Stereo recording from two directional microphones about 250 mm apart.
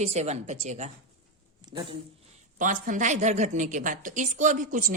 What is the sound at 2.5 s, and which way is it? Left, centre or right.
A woman's voice, right.